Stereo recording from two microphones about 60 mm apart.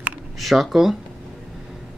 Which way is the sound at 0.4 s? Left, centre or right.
Centre.